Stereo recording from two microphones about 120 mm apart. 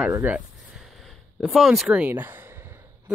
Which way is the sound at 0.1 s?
15° right (ahead or behind).